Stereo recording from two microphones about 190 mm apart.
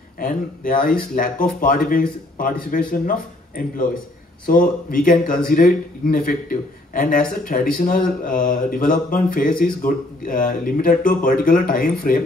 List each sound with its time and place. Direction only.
0.2 s a man's voice: 45° left (ahead or behind)